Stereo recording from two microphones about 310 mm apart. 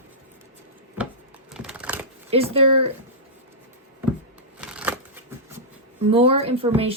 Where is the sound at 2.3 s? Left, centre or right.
Centre.